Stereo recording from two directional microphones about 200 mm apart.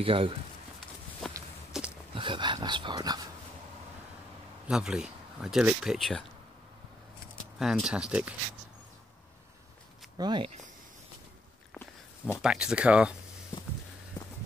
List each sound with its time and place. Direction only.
0.0 s speech: 25° right (ahead or behind)
1.2 s walk: centre (ahead or behind)
1.7 s a sound: centre (ahead or behind)
2.1 s dog: 25° right (ahead or behind)
4.6 s speech: 5° right (ahead or behind)
7.5 s speech: centre (ahead or behind)
10.1 s speech: 20° right (ahead or behind)
11.7 s dog: 10° left (ahead or behind)
12.4 s speech: 5° right (ahead or behind)